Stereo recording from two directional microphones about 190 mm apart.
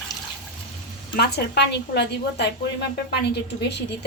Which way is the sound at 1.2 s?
60° left (ahead or behind).